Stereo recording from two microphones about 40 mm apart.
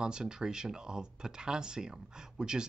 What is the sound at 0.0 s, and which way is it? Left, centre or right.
Speech, centre.